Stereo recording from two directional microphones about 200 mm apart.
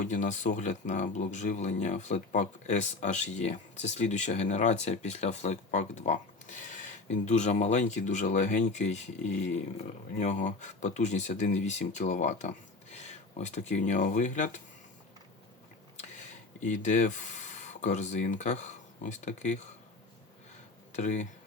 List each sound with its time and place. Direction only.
0.0 s speech: 40° left (ahead or behind)
16.6 s speech: 40° left (ahead or behind)
20.9 s speech: 35° left (ahead or behind)